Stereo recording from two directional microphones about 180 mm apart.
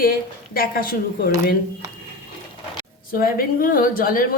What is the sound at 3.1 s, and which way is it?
Speech, 55° left (ahead or behind).